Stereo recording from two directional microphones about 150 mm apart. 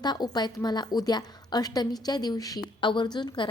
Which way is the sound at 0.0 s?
30° left (ahead or behind).